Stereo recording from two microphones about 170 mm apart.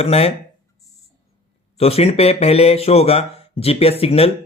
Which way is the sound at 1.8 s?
35° left (ahead or behind).